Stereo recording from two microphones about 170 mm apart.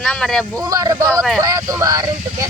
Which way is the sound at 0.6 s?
20° right (ahead or behind).